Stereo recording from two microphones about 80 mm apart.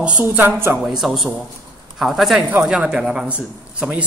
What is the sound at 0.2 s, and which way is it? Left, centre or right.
Speech, right.